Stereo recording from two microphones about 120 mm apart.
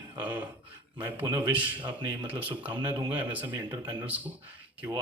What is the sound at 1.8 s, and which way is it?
Speech, 40° right (ahead or behind).